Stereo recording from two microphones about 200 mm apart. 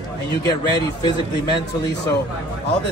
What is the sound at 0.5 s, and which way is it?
Speech, 20° left (ahead or behind).